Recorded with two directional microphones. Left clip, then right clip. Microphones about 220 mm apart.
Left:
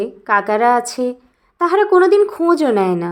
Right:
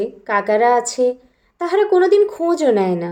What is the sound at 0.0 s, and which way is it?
A woman's voice, 25° left (ahead or behind).